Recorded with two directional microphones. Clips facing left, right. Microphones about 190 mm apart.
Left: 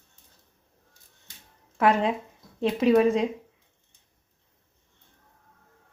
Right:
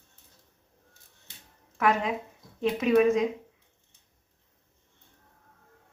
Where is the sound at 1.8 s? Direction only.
30° left (ahead or behind).